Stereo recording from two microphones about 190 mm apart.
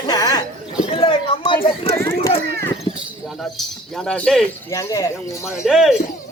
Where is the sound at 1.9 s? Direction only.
15° left (ahead or behind).